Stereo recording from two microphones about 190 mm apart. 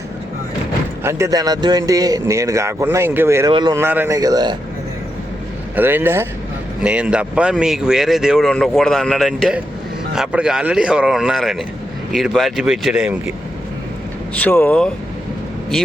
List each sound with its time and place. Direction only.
1.0 s a man's voice: 15° right (ahead or behind)
5.7 s a man's voice: 10° right (ahead or behind)
14.3 s speech: 10° left (ahead or behind)